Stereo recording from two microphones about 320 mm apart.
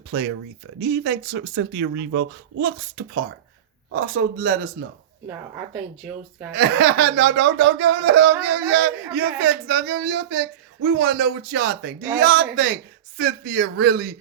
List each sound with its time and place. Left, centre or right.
0.1 s speech: right
3.9 s speech: right
6.5 s speech: right